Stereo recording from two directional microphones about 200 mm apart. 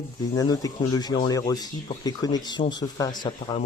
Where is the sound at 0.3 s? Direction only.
20° left (ahead or behind).